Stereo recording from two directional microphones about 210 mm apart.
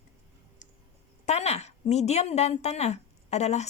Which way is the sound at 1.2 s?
30° left (ahead or behind).